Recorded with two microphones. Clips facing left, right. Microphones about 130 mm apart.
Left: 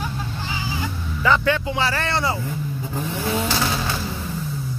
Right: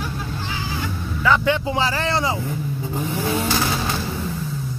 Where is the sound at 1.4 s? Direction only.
20° right (ahead or behind).